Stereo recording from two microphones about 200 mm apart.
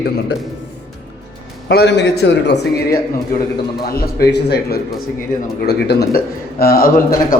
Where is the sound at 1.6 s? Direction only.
60° left (ahead or behind).